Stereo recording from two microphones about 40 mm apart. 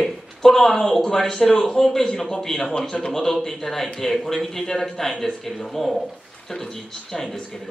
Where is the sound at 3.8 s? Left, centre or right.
Centre.